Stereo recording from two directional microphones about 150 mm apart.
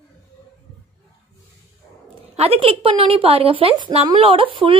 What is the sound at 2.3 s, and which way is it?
A woman's voice, 40° right (ahead or behind).